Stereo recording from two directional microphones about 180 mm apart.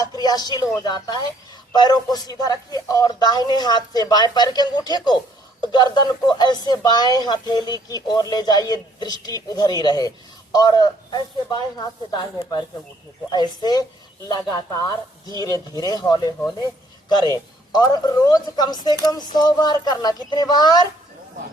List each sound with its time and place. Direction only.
0.0 s speech: 20° left (ahead or behind)